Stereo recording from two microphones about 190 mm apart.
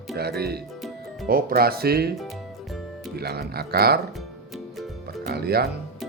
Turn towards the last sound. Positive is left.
turn(degrees=-55)  # may be behind; listen again after turning